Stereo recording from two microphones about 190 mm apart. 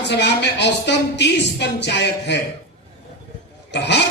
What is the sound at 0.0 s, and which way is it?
A woman's voice, 65° left (ahead or behind).